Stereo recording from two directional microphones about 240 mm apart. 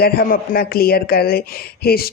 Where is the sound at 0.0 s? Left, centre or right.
Left.